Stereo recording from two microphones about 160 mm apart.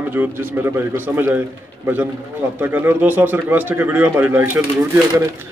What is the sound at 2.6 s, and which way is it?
Speech, 10° right (ahead or behind).